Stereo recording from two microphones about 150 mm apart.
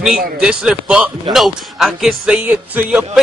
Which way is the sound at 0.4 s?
5° right (ahead or behind).